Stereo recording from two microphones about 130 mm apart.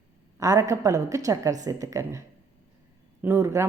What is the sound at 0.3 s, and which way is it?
A woman's voice, 25° right (ahead or behind).